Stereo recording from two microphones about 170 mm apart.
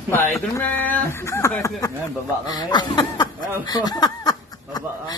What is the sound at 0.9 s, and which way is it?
Speech, 15° left (ahead or behind).